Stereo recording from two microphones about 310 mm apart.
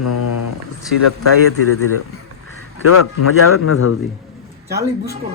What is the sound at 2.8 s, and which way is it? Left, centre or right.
Speech, left.